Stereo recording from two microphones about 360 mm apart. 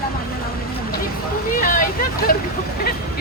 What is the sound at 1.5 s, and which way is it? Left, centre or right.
Speech, left.